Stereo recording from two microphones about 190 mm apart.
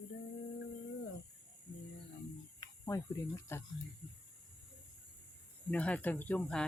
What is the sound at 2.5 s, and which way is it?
Speech, 15° left (ahead or behind).